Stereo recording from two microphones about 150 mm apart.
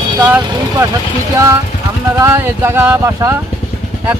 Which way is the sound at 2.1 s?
20° right (ahead or behind).